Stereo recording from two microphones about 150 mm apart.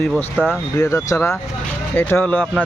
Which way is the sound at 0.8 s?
20° left (ahead or behind).